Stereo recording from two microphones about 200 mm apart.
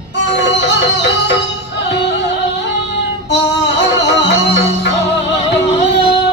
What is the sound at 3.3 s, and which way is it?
Music, 60° left (ahead or behind).